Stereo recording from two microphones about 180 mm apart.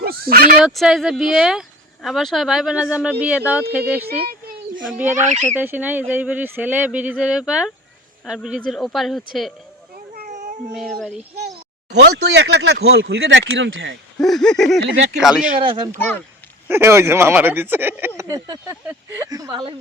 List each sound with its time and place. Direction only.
0.0 s fowl: 55° right (ahead or behind)
0.6 s speech: centre (ahead or behind)
5.1 s speech: 40° right (ahead or behind)
5.5 s speech: 10° right (ahead or behind)
10.2 s a sound: 45° right (ahead or behind)
10.8 s speech: centre (ahead or behind)
11.9 s speech: 70° right (ahead or behind); by 13.9 s 90° right
14.2 s speech: centre (ahead or behind)
16.0 s speech: 10° left (ahead or behind)
16.6 s speech: 15° right (ahead or behind)